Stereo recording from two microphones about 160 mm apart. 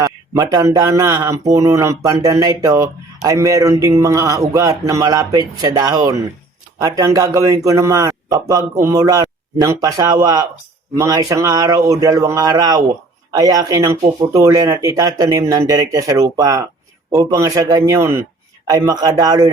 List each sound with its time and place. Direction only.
0.0 s speech: 20° right (ahead or behind)